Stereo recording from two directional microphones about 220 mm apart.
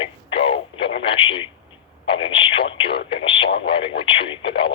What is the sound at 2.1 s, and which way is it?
Speech, 25° left (ahead or behind).